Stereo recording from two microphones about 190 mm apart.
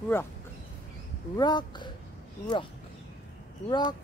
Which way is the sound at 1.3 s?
20° left (ahead or behind).